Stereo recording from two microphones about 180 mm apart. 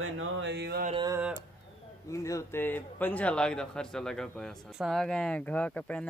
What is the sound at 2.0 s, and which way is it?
Speech, 15° left (ahead or behind).